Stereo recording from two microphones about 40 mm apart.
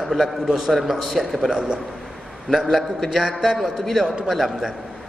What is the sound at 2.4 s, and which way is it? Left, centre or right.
A man's voice, centre.